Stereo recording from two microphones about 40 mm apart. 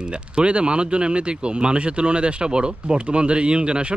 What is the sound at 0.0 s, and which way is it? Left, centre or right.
A man's voice, right.